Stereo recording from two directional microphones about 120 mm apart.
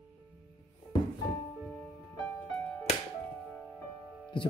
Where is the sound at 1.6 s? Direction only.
10° left (ahead or behind).